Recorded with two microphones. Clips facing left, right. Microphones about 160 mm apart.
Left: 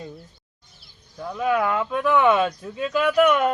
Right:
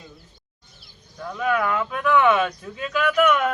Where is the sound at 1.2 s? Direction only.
20° left (ahead or behind).